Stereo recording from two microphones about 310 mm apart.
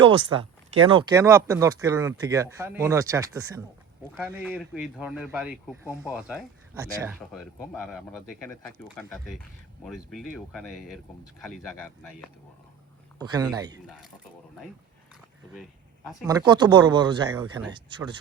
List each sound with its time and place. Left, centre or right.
0.0 s speech: centre
13.4 s speech: centre
16.2 s speech: centre